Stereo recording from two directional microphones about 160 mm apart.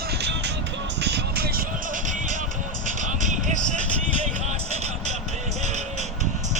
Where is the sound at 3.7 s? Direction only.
50° right (ahead or behind).